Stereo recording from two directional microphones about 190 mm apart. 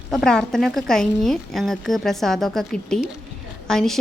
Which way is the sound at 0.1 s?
Centre (ahead or behind).